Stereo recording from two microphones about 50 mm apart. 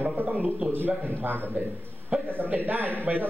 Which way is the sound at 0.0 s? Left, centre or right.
Right.